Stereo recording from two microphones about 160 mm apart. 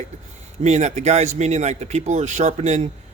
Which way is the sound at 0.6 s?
45° right (ahead or behind).